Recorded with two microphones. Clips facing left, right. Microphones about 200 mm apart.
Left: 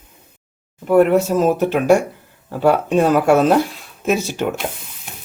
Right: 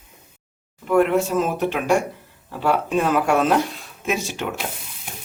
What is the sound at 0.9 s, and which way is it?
Speech, 40° left (ahead or behind).